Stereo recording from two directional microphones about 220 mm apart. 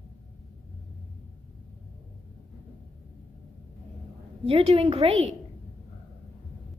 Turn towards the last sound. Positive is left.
turn(degrees=-30)  # may be behind; listen again after turning